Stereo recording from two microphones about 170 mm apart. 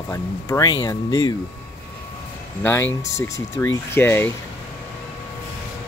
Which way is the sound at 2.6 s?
15° left (ahead or behind).